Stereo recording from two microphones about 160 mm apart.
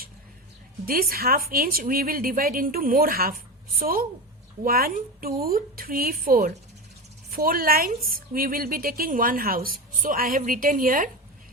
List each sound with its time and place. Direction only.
0.9 s a woman's voice: 65° right (ahead or behind)